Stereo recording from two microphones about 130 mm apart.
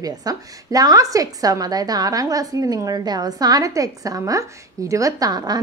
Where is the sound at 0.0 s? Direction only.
30° right (ahead or behind).